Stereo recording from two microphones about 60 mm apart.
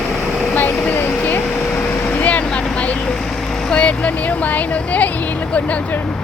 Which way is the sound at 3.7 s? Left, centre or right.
Left.